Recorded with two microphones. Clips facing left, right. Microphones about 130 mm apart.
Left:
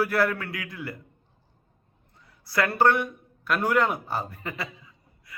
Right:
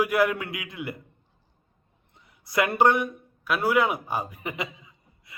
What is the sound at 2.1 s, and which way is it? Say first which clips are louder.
Speech: right 1 dB; 20° right (ahead or behind).